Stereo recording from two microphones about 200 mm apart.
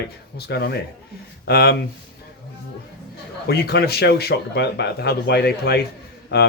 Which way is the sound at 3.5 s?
50° left (ahead or behind).